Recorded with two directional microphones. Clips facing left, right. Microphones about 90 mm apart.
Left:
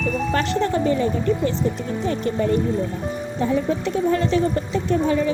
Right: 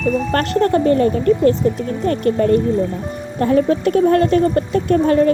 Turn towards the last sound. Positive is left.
turn(degrees=-55)  # may be behind; listen again after turning